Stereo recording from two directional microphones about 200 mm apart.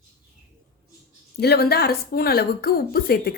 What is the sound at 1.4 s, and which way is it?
A woman's voice, 50° left (ahead or behind).